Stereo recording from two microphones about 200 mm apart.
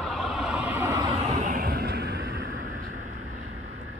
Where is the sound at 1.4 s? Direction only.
45° right (ahead or behind).